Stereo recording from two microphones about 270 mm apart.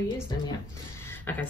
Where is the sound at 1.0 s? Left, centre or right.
Centre.